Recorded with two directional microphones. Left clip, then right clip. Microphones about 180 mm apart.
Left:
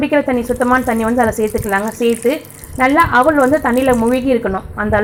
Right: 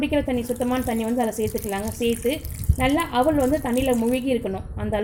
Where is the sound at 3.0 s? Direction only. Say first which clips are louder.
Left 11 dB; 5° right (ahead or behind).